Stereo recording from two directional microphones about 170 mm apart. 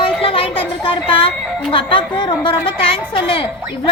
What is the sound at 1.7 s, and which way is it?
A woman's voice, 30° left (ahead or behind).